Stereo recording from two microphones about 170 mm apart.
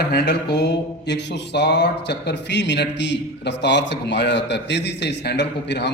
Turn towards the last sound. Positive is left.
turn(degrees=85)